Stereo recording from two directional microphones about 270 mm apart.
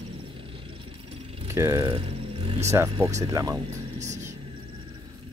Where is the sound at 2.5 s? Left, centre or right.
Right.